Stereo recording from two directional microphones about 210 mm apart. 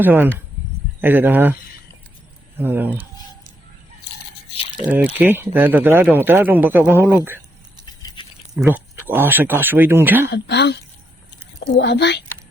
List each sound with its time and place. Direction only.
0.0 s speech: 10° right (ahead or behind)
2.6 s speech: 10° right (ahead or behind)
4.9 s speech: 10° right (ahead or behind)
8.5 s speech: 10° right (ahead or behind)
10.2 s speech: 55° left (ahead or behind)